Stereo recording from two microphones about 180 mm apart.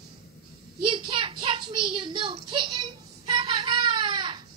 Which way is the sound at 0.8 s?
30° right (ahead or behind).